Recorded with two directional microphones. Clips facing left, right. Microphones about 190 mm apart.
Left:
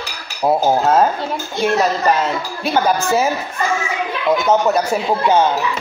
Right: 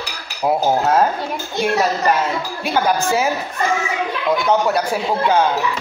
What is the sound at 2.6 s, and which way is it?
Speech, 10° right (ahead or behind).